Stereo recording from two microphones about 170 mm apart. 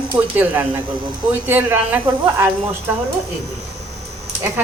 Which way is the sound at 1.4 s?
10° right (ahead or behind).